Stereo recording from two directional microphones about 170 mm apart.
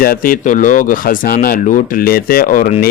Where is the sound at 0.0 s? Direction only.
55° left (ahead or behind).